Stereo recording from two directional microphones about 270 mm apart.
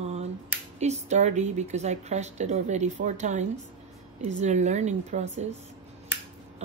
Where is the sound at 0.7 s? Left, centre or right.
Right.